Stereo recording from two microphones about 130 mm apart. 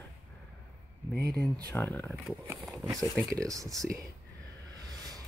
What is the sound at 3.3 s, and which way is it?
Speech, 25° right (ahead or behind).